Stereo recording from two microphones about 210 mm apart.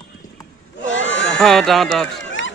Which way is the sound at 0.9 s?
65° left (ahead or behind).